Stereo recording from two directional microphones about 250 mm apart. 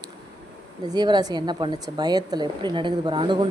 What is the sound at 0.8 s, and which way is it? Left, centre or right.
Speech, centre.